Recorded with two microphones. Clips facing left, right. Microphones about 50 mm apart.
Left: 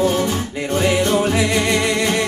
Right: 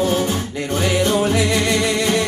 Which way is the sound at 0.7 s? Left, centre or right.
Left.